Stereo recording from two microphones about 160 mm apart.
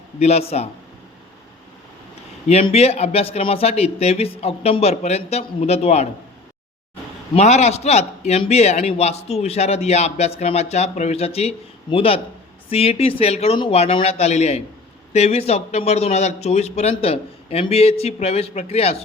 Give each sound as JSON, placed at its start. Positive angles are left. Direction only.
{"t": 0.2, "sound": "a man's voice", "side_deg": 40}
{"t": 2.5, "sound": "a man's voice", "side_deg": 40}
{"t": 7.3, "sound": "a man's voice", "side_deg": 45}